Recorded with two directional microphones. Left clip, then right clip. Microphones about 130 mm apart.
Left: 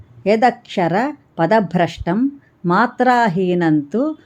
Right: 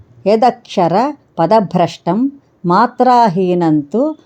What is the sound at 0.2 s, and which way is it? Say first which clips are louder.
A woman's voice: right 3 dB; 15° right (ahead or behind).